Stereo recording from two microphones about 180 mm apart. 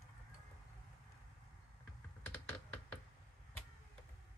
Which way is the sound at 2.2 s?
10° left (ahead or behind).